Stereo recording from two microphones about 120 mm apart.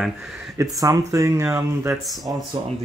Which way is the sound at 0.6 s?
30° right (ahead or behind).